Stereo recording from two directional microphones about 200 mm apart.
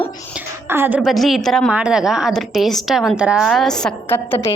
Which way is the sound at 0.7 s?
10° right (ahead or behind).